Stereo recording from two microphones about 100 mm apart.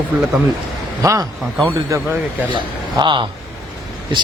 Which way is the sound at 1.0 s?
35° right (ahead or behind).